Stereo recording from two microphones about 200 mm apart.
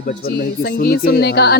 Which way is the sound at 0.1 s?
50° left (ahead or behind).